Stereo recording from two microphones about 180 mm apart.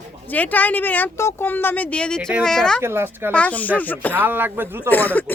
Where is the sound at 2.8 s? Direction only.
15° right (ahead or behind).